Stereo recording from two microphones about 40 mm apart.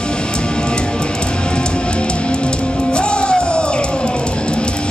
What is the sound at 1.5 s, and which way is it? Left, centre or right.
Music, left.